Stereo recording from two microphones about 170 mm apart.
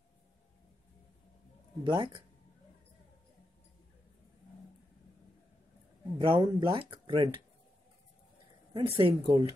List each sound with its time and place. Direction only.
1.9 s speech: 30° right (ahead or behind)
6.1 s speech: 30° right (ahead or behind)
8.7 s speech: 30° right (ahead or behind)